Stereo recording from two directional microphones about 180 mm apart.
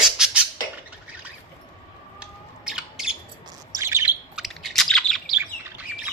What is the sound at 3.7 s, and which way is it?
Bird, 15° right (ahead or behind).